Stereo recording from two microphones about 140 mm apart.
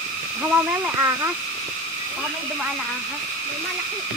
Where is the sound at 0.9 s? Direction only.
20° right (ahead or behind).